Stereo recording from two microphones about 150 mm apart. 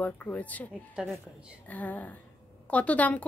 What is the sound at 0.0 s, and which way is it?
Speech, 10° left (ahead or behind).